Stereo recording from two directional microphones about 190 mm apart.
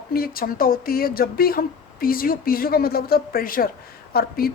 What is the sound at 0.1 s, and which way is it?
A woman's voice, 50° left (ahead or behind).